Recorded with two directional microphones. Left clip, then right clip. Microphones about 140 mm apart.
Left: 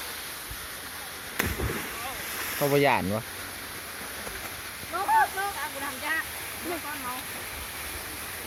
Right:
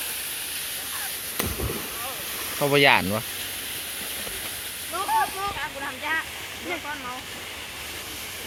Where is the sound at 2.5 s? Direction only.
Centre (ahead or behind).